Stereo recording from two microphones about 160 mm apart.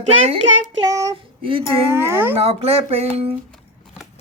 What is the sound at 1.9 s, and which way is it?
Speech, 15° right (ahead or behind).